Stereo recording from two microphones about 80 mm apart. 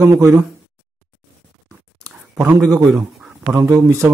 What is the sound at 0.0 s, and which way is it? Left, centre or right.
Speech, right.